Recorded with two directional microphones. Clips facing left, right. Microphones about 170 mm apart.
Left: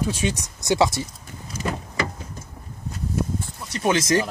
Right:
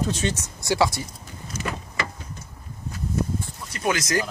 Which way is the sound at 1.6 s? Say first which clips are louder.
Left 4 dB; 35° left (ahead or behind).